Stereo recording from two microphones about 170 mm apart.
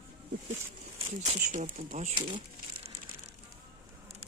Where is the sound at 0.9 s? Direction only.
35° right (ahead or behind).